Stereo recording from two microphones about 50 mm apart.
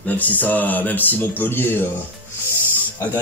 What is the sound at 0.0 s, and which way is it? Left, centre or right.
Speech, left.